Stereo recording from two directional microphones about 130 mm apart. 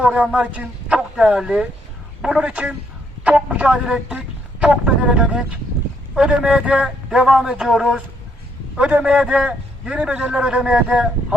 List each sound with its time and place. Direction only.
0.0 s a man's voice: 10° right (ahead or behind)